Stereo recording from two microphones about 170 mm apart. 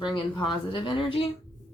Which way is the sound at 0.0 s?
25° left (ahead or behind).